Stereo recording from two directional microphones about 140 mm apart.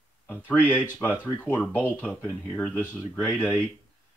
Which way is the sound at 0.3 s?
10° left (ahead or behind).